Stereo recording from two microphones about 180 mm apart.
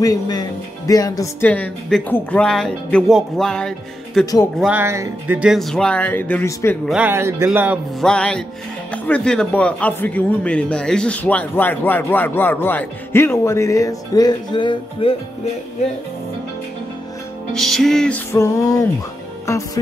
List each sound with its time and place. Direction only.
0.0 s speech: 20° left (ahead or behind); by 4.3 s 5° left (ahead or behind)
4.6 s speech: 10° right (ahead or behind); by 6.8 s 15° left (ahead or behind)
6.9 s speech: 10° right (ahead or behind)
8.0 s speech: 5° left (ahead or behind); by 15.1 s 30° left (ahead or behind)
17.6 s speech: centre (ahead or behind)
18.3 s music: 15° left (ahead or behind)
19.4 s speech: 15° left (ahead or behind)